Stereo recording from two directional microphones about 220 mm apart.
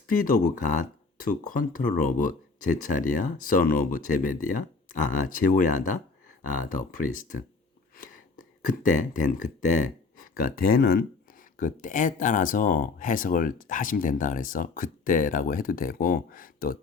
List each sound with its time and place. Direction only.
0.1 s speech: 40° left (ahead or behind)
7.2 s speech: 35° left (ahead or behind)